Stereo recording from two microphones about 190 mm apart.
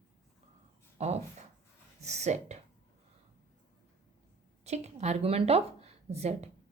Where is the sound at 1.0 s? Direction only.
35° right (ahead or behind).